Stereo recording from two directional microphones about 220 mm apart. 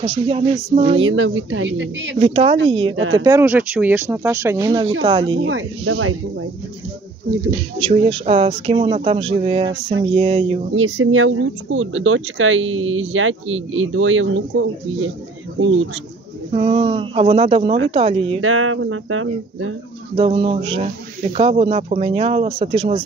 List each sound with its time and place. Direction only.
0.0 s speech: 25° right (ahead or behind)
1.0 s speech: 65° right (ahead or behind)
2.1 s speech: 25° right (ahead or behind)
5.4 s speech: 60° right (ahead or behind)
7.9 s speech: 25° right (ahead or behind)
10.7 s speech: 65° right (ahead or behind)
16.5 s speech: 25° right (ahead or behind)
18.4 s speech: 70° right (ahead or behind)
20.2 s speech: 25° right (ahead or behind)